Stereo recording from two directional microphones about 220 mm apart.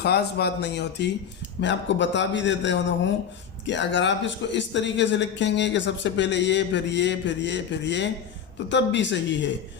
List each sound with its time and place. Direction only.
0.0 s a man's voice: 45° left (ahead or behind)